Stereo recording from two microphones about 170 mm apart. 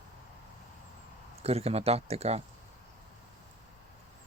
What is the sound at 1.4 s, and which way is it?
Speech, 35° right (ahead or behind).